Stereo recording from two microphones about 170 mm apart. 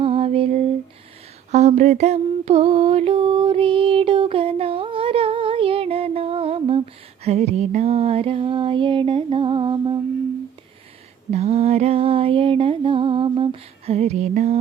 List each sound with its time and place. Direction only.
0.0 s lullaby: 35° right (ahead or behind)
1.5 s mantra: 40° right (ahead or behind)
11.3 s music: 40° right (ahead or behind)